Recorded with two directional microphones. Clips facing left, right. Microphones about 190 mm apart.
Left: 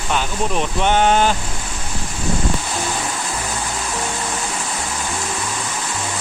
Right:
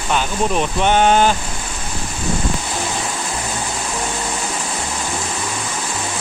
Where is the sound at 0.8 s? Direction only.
15° right (ahead or behind).